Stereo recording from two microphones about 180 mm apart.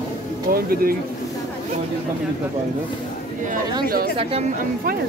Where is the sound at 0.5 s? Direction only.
55° right (ahead or behind).